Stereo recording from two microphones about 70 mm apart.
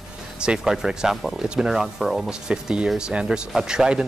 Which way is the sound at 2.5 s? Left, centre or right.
Centre.